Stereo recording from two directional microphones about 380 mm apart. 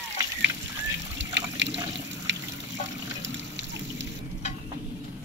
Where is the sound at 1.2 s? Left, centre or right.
Right.